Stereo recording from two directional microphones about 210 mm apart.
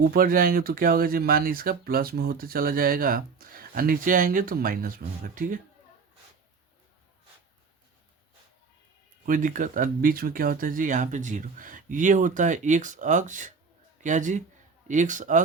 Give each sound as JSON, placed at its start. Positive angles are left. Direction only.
{"t": 0.1, "sound": "speech", "side_deg": -45}
{"t": 9.2, "sound": "speech", "side_deg": -40}